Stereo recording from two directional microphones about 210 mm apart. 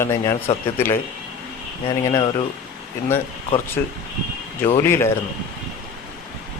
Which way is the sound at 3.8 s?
10° left (ahead or behind).